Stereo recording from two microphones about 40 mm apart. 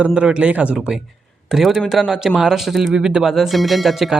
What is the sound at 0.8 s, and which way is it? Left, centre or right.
Speech, centre.